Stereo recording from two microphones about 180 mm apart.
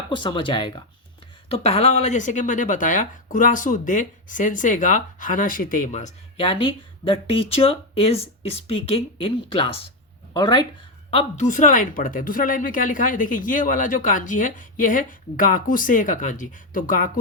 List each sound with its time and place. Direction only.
0.1 s speech: 25° left (ahead or behind)
11.5 s speech: 45° left (ahead or behind)